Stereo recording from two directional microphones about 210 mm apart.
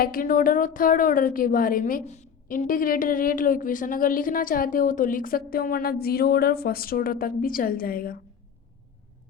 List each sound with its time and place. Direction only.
0.0 s a woman's voice: 40° left (ahead or behind)